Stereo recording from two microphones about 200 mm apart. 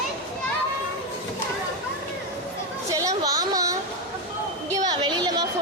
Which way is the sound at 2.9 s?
15° right (ahead or behind).